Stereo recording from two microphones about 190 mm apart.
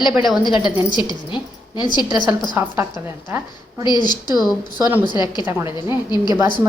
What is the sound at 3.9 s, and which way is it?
A woman's voice, 20° left (ahead or behind).